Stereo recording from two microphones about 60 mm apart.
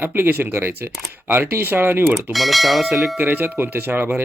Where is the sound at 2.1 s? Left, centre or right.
Centre.